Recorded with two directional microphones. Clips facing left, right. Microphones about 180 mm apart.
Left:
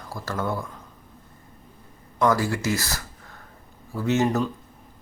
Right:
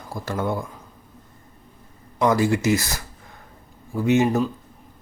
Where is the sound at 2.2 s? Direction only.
20° right (ahead or behind).